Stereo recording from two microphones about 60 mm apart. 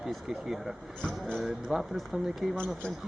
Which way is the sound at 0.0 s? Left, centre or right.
Centre.